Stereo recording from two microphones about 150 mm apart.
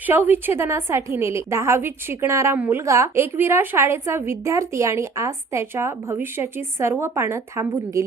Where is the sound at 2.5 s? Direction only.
10° right (ahead or behind).